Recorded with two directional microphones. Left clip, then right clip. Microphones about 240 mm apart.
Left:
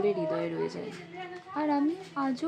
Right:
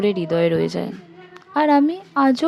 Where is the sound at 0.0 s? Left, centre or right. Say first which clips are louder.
Right 10 dB; right.